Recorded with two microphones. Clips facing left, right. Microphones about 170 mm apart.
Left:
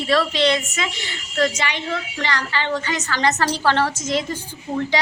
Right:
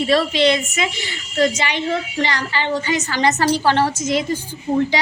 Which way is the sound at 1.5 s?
25° right (ahead or behind).